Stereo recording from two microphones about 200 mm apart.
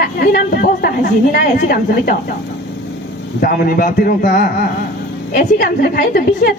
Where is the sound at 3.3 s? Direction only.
45° left (ahead or behind).